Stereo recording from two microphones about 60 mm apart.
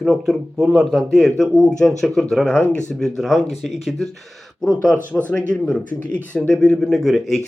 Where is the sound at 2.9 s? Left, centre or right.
Centre.